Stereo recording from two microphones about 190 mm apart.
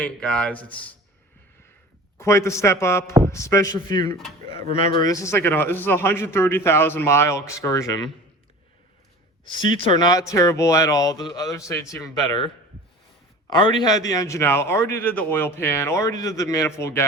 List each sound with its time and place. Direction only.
0.0 s a man's voice: 5° left (ahead or behind)
2.1 s a man's voice: 15° left (ahead or behind)
4.6 s speech: 45° right (ahead or behind)
4.9 s a man's voice: 15° left (ahead or behind)
9.6 s speech: 25° left (ahead or behind)
13.5 s a man's voice: 25° left (ahead or behind)